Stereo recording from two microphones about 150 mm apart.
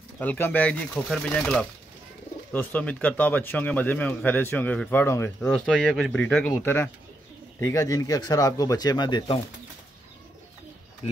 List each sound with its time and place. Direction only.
0.2 s speech: 10° left (ahead or behind)
5.5 s speech: 5° left (ahead or behind); by 9.4 s 30° left (ahead or behind)